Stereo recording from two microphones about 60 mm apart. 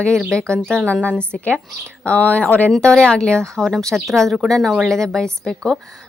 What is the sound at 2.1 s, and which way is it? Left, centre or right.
Speech, left.